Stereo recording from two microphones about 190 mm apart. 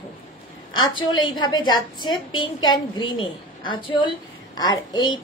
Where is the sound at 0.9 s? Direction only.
25° left (ahead or behind).